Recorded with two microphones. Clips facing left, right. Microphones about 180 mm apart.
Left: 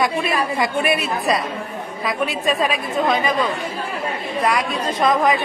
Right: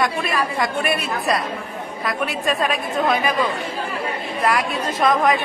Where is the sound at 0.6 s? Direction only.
Centre (ahead or behind).